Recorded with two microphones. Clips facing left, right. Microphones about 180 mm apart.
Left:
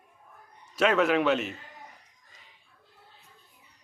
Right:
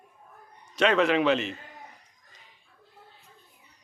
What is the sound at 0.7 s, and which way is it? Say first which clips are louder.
Speech: right 1 dB; 5° left (ahead or behind).